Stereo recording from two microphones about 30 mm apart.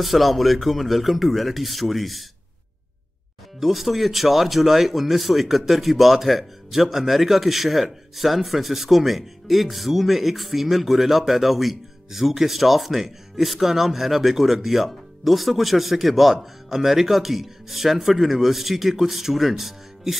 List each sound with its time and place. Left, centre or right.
0.0 s speech: centre
3.5 s speech: centre